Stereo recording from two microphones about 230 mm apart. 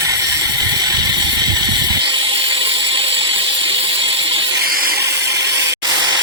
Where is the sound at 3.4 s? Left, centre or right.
Right.